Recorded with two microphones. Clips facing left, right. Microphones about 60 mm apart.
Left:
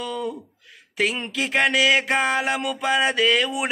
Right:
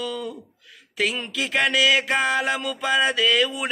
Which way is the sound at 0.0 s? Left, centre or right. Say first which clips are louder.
Left 2 dB; left.